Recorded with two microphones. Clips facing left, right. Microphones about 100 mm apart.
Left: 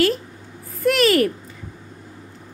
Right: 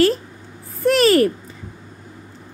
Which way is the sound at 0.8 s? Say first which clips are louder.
Right 3 dB; 35° right (ahead or behind).